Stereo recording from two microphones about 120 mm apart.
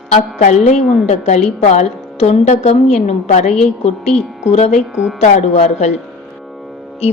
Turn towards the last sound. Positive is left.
turn(degrees=65)  # may be behind; listen again after turning